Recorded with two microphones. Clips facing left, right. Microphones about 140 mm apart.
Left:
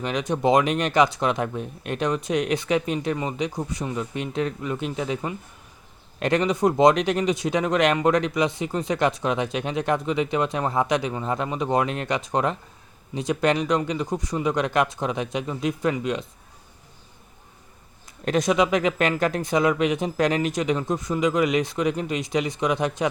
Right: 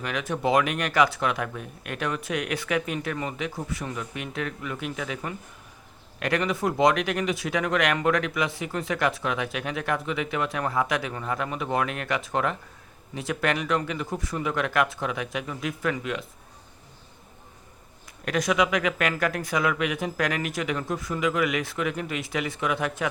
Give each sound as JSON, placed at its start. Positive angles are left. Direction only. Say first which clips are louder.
{"t": 0.0, "sound": "speech", "louder": "left 4 dB", "side_deg": 20}
{"t": 18.3, "sound": "speech", "louder": "left 3 dB", "side_deg": 25}